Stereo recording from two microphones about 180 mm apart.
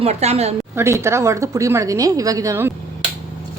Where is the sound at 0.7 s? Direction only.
15° right (ahead or behind).